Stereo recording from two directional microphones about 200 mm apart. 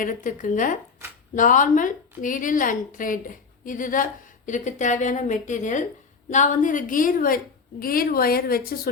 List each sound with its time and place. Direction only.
0.0 s a woman's voice: 40° left (ahead or behind)